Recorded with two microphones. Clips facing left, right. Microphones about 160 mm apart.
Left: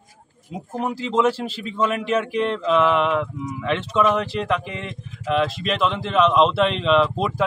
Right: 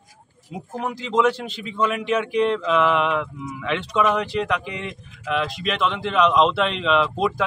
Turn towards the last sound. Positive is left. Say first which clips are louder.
# left 2 dB
turn(degrees=5)  # may be behind; listen again after turning